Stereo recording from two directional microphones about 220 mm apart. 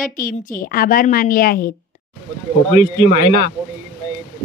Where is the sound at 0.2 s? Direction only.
40° left (ahead or behind).